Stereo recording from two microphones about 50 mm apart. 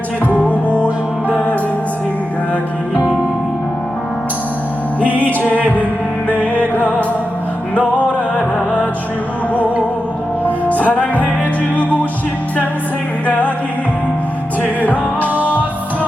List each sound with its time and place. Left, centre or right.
0.4 s music: left
4.9 s music: left
9.5 s music: left
13.2 s music: left
14.6 s music: left